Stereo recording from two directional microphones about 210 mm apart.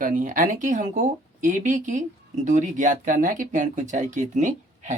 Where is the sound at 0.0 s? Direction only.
40° right (ahead or behind).